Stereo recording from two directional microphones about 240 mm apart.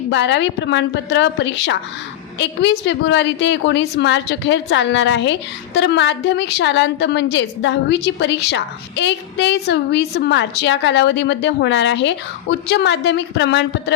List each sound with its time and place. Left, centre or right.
0.1 s a woman's voice: left